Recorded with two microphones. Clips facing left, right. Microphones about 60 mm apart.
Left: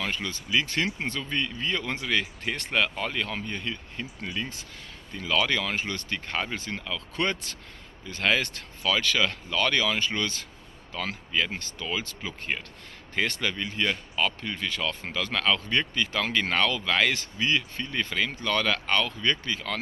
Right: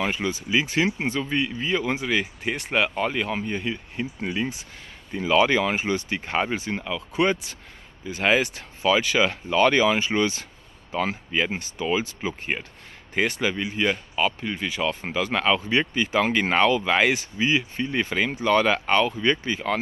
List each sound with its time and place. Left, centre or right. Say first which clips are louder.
0.0 s speech: right 6 dB; centre